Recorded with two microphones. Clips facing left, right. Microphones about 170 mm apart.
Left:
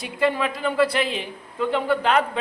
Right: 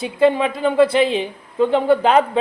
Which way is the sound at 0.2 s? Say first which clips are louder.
Right 7 dB; 25° right (ahead or behind).